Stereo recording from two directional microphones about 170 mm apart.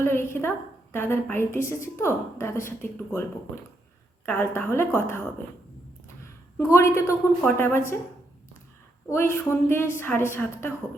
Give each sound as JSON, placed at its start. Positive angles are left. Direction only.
{"t": 0.0, "sound": "a sound", "side_deg": 15}
{"t": 0.9, "sound": "a woman's voice", "side_deg": 15}
{"t": 6.6, "sound": "a woman's voice", "side_deg": 15}
{"t": 9.0, "sound": "a woman's voice", "side_deg": 15}